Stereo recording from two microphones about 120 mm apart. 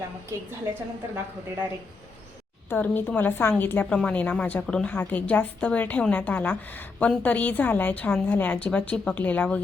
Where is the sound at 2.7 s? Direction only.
15° left (ahead or behind).